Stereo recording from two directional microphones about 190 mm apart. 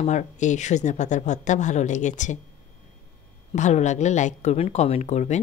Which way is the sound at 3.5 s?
35° left (ahead or behind).